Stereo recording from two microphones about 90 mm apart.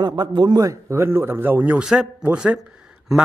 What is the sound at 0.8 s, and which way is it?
A man's voice, 30° right (ahead or behind).